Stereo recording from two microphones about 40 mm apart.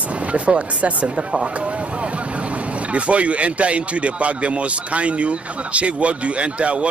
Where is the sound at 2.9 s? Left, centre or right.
Right.